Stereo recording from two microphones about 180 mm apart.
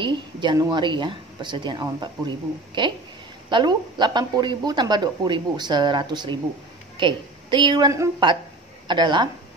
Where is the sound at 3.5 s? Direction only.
25° right (ahead or behind).